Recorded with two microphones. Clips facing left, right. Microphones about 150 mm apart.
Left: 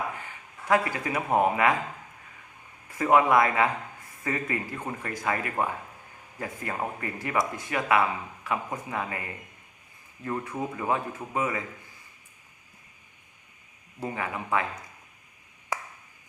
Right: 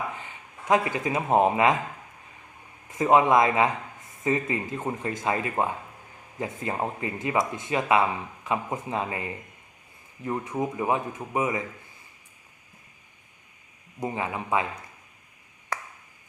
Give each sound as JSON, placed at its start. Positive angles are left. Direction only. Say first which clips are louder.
{"t": 0.2, "sound": "speech", "louder": "right 1 dB", "side_deg": -20}
{"t": 2.9, "sound": "speech", "louder": "right 2 dB", "side_deg": -20}
{"t": 14.0, "sound": "speech", "louder": "right 2 dB", "side_deg": -20}